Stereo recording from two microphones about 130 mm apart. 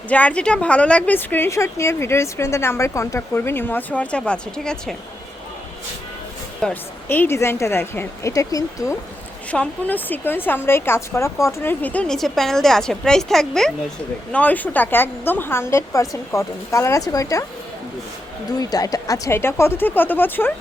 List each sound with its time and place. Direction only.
0.1 s a woman's voice: 10° left (ahead or behind)
6.6 s a woman's voice: 10° left (ahead or behind); by 9.0 s 25° left (ahead or behind)
9.5 s a woman's voice: 10° left (ahead or behind); by 17.4 s 25° left (ahead or behind)
18.6 s a woman's voice: 30° left (ahead or behind)